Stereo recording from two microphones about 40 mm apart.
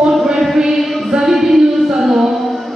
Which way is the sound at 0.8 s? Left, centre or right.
Centre.